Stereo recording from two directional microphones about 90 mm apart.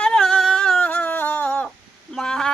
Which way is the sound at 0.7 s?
15° left (ahead or behind).